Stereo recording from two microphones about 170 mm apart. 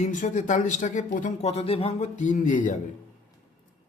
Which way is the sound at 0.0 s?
50° left (ahead or behind).